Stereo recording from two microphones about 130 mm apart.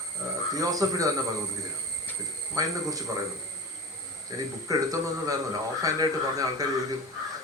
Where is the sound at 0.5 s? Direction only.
30° right (ahead or behind).